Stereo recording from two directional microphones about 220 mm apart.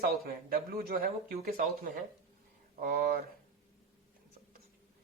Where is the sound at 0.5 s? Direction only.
40° right (ahead or behind).